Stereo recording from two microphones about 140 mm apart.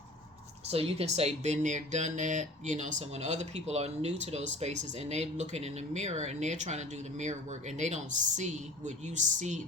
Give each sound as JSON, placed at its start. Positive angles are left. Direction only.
{"t": 0.7, "sound": "speech", "side_deg": -45}